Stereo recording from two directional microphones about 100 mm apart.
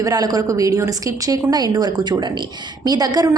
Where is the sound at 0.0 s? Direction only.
40° right (ahead or behind).